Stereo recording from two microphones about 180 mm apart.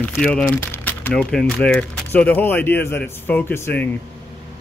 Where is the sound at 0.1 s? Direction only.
5° left (ahead or behind).